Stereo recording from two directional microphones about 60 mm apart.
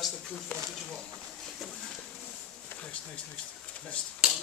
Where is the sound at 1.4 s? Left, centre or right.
Centre.